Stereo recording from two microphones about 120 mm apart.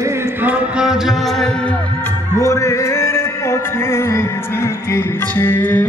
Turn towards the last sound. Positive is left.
turn(degrees=15)  # may be behind; listen again after turning